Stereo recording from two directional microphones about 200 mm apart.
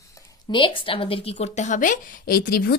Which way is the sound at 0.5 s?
25° left (ahead or behind).